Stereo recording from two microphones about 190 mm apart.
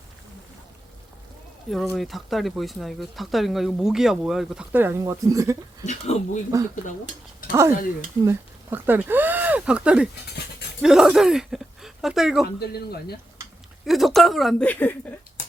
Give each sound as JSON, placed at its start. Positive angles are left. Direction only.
{"t": 1.7, "sound": "speech", "side_deg": 0}
{"t": 5.8, "sound": "speech", "side_deg": 35}
{"t": 7.5, "sound": "speech", "side_deg": -15}
{"t": 12.5, "sound": "speech", "side_deg": 55}
{"t": 13.8, "sound": "speech", "side_deg": 0}